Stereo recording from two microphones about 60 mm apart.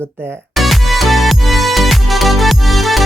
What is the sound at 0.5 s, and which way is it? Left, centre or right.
Music, centre.